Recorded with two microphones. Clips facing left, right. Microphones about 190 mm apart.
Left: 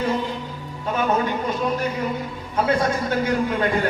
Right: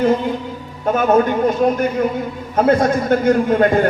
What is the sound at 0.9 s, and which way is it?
A man's voice, 50° right (ahead or behind).